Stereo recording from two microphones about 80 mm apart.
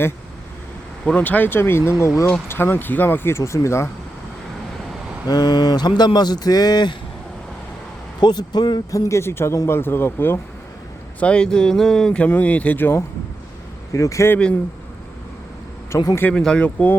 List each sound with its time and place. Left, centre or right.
1.0 s speech: centre; by 3.8 s left
5.3 s a man's voice: left
8.2 s a man's voice: left
8.9 s speech: left
11.2 s speech: centre
13.9 s speech: left
15.9 s speech: left
16.3 s speech: centre